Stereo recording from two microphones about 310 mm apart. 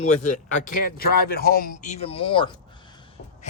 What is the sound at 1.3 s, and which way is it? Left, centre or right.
A man's voice, left.